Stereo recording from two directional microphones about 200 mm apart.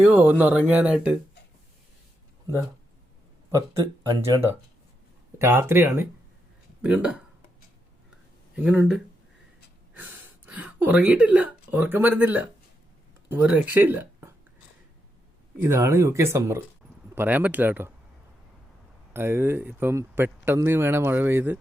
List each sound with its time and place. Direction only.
0.0 s speech: 10° right (ahead or behind)
4.0 s speech: 15° right (ahead or behind)
5.4 s speech: 10° right (ahead or behind)
8.5 s speech: 5° right (ahead or behind)
10.4 s speech: 10° right (ahead or behind)
15.6 s speech: 15° right (ahead or behind)
19.1 s speech: 10° right (ahead or behind)